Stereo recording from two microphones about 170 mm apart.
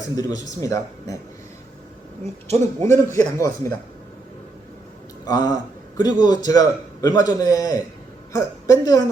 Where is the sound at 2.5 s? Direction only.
40° right (ahead or behind).